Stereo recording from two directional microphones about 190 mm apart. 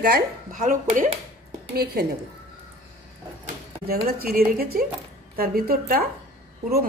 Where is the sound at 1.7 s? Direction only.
55° right (ahead or behind).